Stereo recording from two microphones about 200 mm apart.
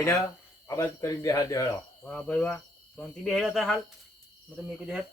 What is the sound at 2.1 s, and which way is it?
Speech, 5° left (ahead or behind).